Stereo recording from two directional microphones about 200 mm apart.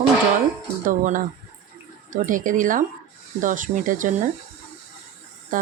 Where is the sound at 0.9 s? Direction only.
40° right (ahead or behind).